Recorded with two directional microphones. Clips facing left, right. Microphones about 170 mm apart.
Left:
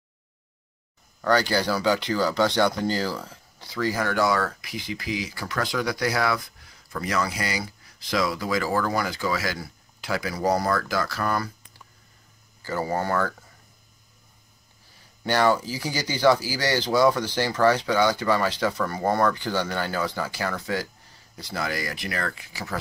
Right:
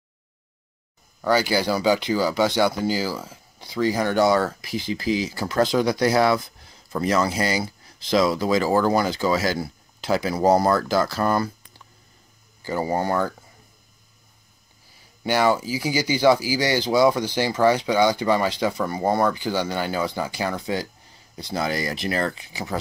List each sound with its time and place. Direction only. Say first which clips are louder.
1.2 s speech: right 2 dB; 10° right (ahead or behind); by 11.5 s 25° right (ahead or behind)
12.6 s speech: right 3 dB; 15° right (ahead or behind)
15.2 s speech: right 1 dB; 10° right (ahead or behind)